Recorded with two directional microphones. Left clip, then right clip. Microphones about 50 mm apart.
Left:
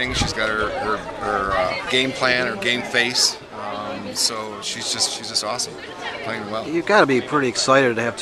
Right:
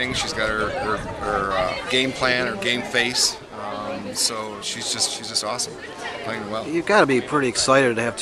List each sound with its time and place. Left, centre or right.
0.0 s speech: centre
4.8 s speech: centre